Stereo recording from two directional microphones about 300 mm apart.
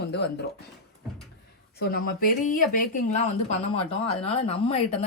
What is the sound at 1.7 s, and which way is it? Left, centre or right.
Speech, left.